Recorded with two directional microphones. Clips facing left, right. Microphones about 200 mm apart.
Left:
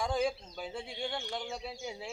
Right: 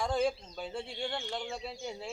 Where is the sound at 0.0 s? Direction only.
Centre (ahead or behind).